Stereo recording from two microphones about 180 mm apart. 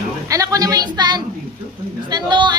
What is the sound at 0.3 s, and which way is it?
Music, 20° right (ahead or behind).